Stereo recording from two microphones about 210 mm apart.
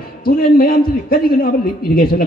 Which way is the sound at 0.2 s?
45° left (ahead or behind).